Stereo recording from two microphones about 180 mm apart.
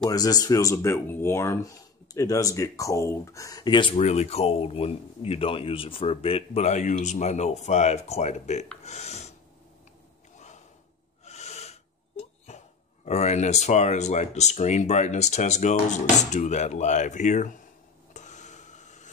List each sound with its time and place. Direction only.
0.1 s speech: 20° left (ahead or behind)
4.0 s speech: 35° left (ahead or behind)
11.2 s speech: 35° left (ahead or behind)
18.1 s a sound: 40° left (ahead or behind)